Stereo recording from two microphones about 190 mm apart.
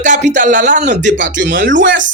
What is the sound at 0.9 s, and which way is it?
Speech, 65° right (ahead or behind).